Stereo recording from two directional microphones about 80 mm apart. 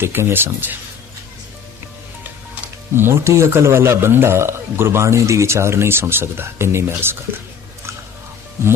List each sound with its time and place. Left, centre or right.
0.0 s speech: right
2.9 s speech: right
8.6 s speech: right